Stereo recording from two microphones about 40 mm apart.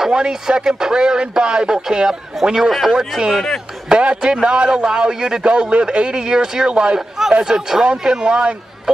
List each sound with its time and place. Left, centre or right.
0.1 s a man's voice: centre
4.2 s a man's voice: right
7.0 s a man's voice: centre